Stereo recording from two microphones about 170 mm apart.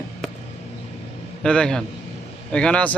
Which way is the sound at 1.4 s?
5° left (ahead or behind).